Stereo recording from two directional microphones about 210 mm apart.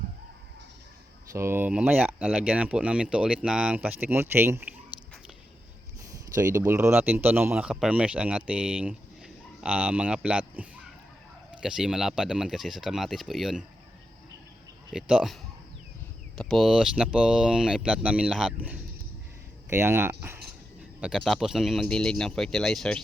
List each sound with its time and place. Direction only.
1.3 s speech: 10° right (ahead or behind)
6.3 s speech: 15° right (ahead or behind)
14.9 s speech: 5° right (ahead or behind)
16.4 s speech: centre (ahead or behind)
19.8 s speech: 10° right (ahead or behind)
21.0 s speech: centre (ahead or behind)